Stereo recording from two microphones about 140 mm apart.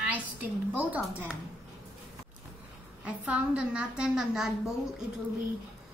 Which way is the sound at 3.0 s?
10° right (ahead or behind).